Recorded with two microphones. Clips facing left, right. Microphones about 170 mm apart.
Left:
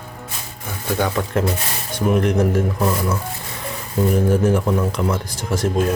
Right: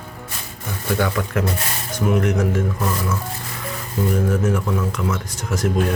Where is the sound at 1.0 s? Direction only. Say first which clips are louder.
Left 3 dB; 25° left (ahead or behind).